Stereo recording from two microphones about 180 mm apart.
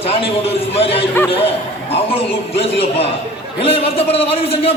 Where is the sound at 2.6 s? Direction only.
35° left (ahead or behind).